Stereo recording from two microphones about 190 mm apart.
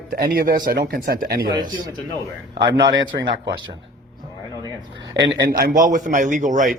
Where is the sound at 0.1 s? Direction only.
55° right (ahead or behind).